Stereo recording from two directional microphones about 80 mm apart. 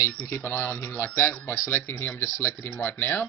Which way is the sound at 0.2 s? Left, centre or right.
Left.